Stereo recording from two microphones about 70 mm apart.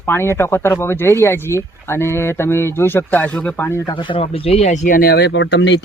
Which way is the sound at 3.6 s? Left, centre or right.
Left.